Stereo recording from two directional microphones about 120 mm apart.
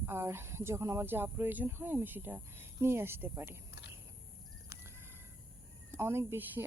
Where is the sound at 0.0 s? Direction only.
20° right (ahead or behind).